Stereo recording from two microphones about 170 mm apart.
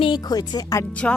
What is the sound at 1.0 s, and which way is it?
Speech, 5° left (ahead or behind).